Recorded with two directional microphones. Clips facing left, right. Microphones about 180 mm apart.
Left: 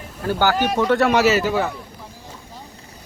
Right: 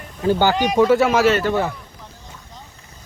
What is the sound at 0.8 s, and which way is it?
Speech, 5° right (ahead or behind).